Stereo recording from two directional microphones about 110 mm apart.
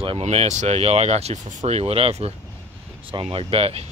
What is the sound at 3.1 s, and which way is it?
Speech, 55° right (ahead or behind).